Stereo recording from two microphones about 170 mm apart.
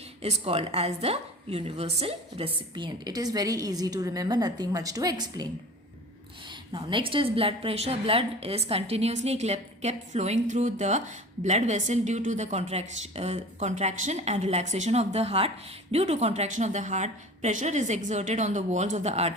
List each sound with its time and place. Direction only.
0.2 s a woman's voice: 35° right (ahead or behind)
6.5 s a woman's voice: 30° right (ahead or behind)